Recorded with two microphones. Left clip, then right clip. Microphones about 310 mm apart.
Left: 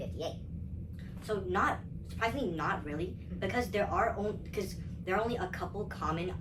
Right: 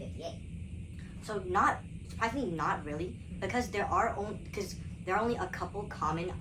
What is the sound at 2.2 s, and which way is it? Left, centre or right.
Speech, centre.